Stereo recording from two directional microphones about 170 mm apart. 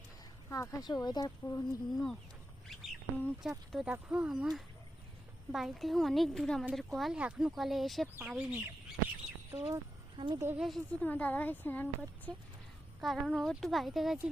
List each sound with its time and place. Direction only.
0.5 s speech: 20° left (ahead or behind)
1.9 s speech: centre (ahead or behind)
2.6 s duck: centre (ahead or behind)
3.7 s speech: centre (ahead or behind)
9.6 s speech: 25° right (ahead or behind)
10.4 s speech: 10° right (ahead or behind)
10.7 s speech: 5° left (ahead or behind)
13.0 s speech: centre (ahead or behind)